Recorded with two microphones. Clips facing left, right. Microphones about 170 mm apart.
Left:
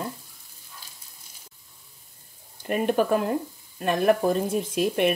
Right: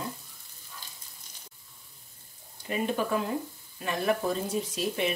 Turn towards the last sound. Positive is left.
turn(degrees=55)  # may be behind; listen again after turning